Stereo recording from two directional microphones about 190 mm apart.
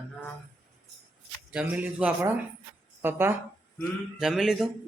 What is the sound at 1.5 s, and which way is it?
Speech, 5° right (ahead or behind).